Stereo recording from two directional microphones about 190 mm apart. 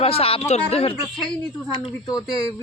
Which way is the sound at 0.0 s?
30° left (ahead or behind).